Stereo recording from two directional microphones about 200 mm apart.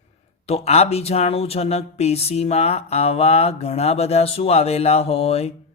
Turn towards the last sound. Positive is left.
turn(degrees=30)  # may be behind; listen again after turning